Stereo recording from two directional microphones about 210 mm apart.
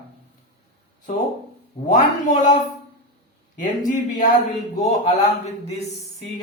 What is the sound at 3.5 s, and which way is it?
Music, 35° left (ahead or behind).